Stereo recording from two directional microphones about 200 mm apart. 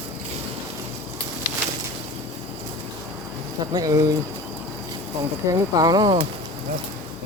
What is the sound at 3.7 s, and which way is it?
Speech, 15° right (ahead or behind).